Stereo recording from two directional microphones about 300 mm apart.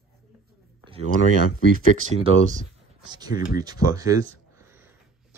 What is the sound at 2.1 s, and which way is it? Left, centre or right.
Speech, centre.